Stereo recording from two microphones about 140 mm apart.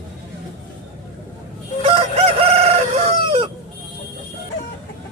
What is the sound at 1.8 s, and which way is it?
Chicken, 40° right (ahead or behind).